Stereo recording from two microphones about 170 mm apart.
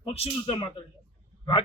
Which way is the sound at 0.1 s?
35° left (ahead or behind).